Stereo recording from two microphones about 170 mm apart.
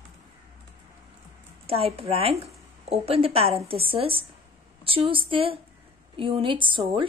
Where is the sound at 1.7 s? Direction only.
35° right (ahead or behind).